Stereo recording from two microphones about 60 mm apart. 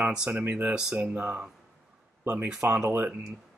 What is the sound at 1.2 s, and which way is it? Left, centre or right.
Speech, right.